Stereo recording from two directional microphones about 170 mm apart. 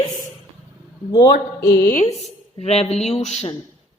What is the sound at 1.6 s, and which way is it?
Speech, 75° left (ahead or behind).